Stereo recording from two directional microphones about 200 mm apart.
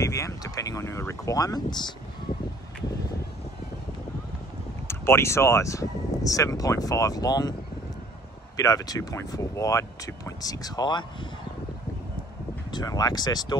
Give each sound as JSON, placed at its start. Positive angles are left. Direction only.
{"t": 0.0, "sound": "speech", "side_deg": 15}
{"t": 4.8, "sound": "speech", "side_deg": 15}
{"t": 8.5, "sound": "speech", "side_deg": 15}
{"t": 12.7, "sound": "speech", "side_deg": 20}